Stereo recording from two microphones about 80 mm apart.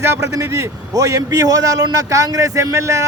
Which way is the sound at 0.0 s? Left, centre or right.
Right.